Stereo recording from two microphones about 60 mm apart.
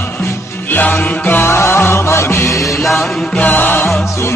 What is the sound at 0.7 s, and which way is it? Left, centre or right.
Music, left.